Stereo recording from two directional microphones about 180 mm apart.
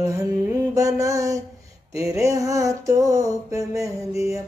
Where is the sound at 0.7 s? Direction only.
20° right (ahead or behind).